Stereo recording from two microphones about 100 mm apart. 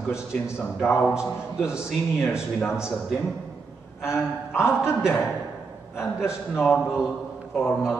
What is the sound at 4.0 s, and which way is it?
Speech, 5° right (ahead or behind).